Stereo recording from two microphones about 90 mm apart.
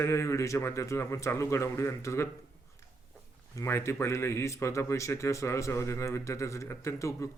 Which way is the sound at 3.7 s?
30° left (ahead or behind).